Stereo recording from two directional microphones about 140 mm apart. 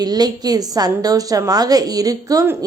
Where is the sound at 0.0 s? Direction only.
30° right (ahead or behind).